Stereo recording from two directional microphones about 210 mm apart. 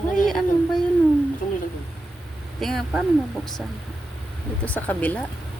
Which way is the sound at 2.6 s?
Centre (ahead or behind).